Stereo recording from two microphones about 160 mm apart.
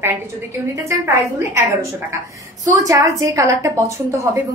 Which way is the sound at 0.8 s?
20° right (ahead or behind).